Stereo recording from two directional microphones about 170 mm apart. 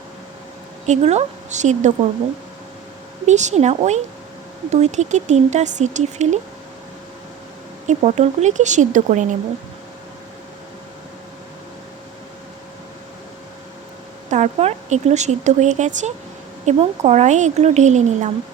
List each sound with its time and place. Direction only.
0.9 s speech: 40° right (ahead or behind)
3.2 s a woman's voice: 45° right (ahead or behind)
7.9 s speech: 40° right (ahead or behind)
14.3 s a woman's voice: 45° right (ahead or behind)